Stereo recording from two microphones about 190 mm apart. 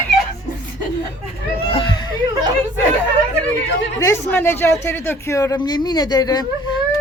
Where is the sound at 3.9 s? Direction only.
15° left (ahead or behind).